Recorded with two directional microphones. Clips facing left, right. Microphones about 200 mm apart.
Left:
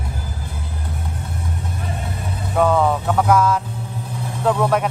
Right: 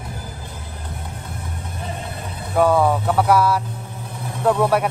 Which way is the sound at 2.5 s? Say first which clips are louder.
Right 1 dB; 10° right (ahead or behind).